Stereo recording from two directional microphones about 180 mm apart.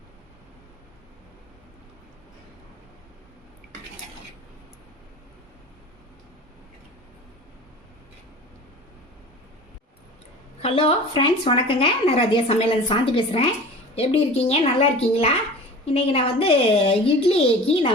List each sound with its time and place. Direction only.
10.6 s a woman's voice: 30° left (ahead or behind)
15.9 s a woman's voice: 35° left (ahead or behind)